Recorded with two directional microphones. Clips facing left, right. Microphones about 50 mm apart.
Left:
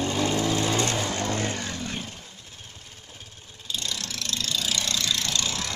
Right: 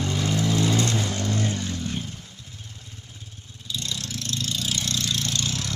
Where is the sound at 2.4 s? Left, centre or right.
Left.